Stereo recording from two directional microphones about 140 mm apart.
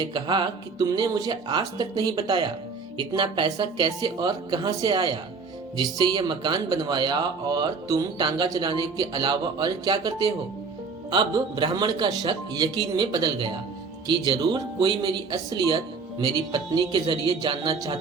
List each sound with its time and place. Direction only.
0.0 s speech: 35° right (ahead or behind)